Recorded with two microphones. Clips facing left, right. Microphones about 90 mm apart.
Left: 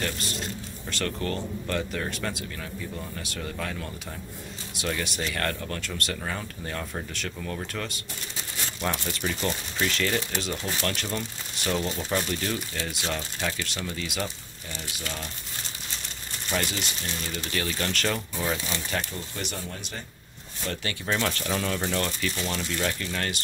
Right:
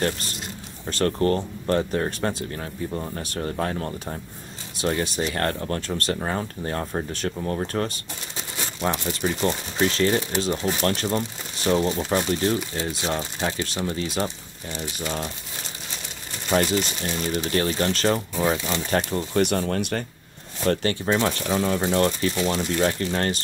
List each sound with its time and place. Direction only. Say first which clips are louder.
0.8 s speech: right 9 dB; 35° right (ahead or behind)
9.2 s speech: right 7 dB; 25° right (ahead or behind)
16.4 s speech: right 8 dB; 40° right (ahead or behind)
18.9 s speech: right 10 dB; 50° right (ahead or behind)
20.6 s speech: right 9 dB; 40° right (ahead or behind)
22.4 s speech: right 9 dB; 20° right (ahead or behind)
22.7 s speech: right 7 dB; 35° right (ahead or behind)